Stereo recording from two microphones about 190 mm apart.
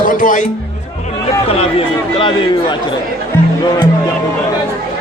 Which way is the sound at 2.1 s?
25° left (ahead or behind).